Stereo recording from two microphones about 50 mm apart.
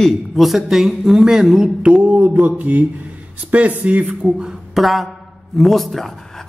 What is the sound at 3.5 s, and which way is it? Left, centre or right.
Speech, right.